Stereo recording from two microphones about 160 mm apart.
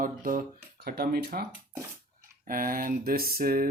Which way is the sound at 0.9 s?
70° right (ahead or behind).